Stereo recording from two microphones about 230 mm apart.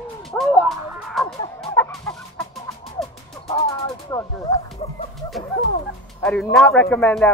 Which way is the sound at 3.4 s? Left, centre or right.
Centre.